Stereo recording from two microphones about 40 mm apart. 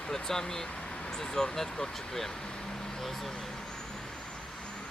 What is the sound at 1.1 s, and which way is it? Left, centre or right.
Speech, centre.